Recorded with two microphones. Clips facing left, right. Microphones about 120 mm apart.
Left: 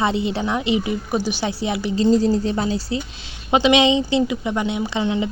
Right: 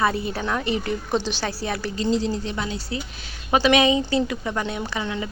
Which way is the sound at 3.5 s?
20° left (ahead or behind).